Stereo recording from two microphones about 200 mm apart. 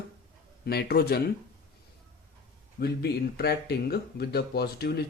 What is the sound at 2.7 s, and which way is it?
Speech, 55° left (ahead or behind).